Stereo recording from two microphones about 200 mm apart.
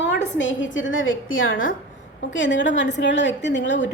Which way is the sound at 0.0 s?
65° left (ahead or behind).